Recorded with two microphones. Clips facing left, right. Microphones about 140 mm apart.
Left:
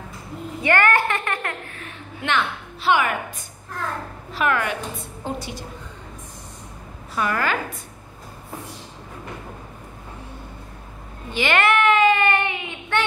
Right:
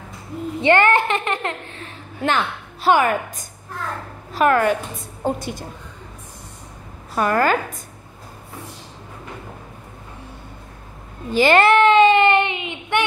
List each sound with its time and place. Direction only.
0.6 s a child's voice: 25° right (ahead or behind)
2.2 s a woman's voice: 40° right (ahead or behind)
7.2 s a woman's voice: 40° right (ahead or behind)
11.3 s a child's voice: 35° right (ahead or behind); by 13.0 s 20° right (ahead or behind)